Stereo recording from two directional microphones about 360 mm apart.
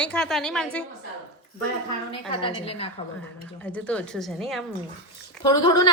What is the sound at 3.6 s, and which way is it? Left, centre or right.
A woman's voice, centre.